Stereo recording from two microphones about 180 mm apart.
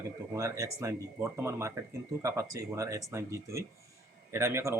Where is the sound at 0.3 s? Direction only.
15° right (ahead or behind).